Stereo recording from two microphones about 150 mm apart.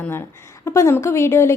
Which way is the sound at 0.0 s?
15° left (ahead or behind).